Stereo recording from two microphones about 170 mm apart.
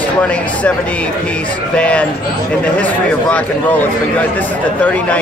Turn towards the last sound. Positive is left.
turn(degrees=10)  # may be behind; listen again after turning